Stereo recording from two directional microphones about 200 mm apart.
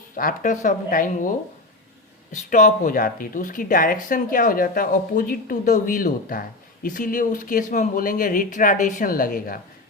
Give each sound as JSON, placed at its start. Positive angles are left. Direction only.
{"t": 0.2, "sound": "speech", "side_deg": 40}
{"t": 2.5, "sound": "speech", "side_deg": 40}